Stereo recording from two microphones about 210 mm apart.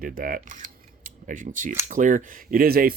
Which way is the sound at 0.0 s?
45° right (ahead or behind).